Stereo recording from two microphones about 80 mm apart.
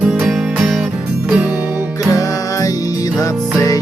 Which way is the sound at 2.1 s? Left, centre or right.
Left.